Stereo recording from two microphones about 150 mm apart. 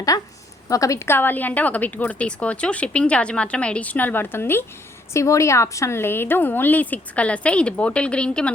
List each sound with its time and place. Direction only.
0.1 s a woman's voice: 25° left (ahead or behind); by 8.5 s 5° left (ahead or behind)